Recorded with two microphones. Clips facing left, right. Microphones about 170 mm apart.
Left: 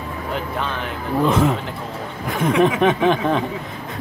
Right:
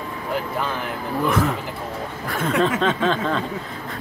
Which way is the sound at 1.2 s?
20° left (ahead or behind).